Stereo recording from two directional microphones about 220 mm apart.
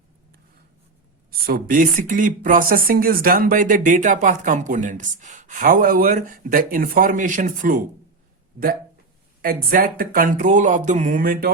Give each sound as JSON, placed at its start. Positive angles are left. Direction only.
{"t": 1.3, "sound": "speech", "side_deg": -40}
{"t": 9.4, "sound": "speech", "side_deg": -40}